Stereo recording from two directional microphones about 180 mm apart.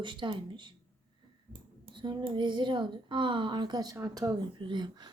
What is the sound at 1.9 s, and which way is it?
Speech, 25° right (ahead or behind).